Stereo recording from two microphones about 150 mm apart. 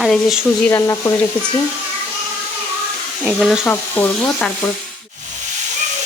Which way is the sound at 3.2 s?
5° right (ahead or behind).